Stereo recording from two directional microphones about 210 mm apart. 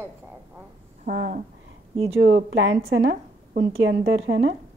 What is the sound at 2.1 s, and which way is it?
Speech, 60° right (ahead or behind).